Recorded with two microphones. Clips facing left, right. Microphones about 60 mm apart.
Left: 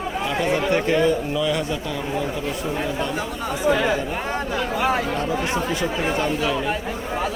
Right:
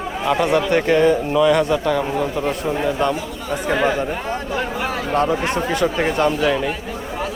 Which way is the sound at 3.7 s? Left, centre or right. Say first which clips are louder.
Right 1 dB; centre.